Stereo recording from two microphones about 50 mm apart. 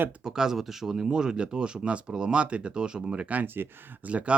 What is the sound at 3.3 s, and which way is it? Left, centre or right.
Speech, right.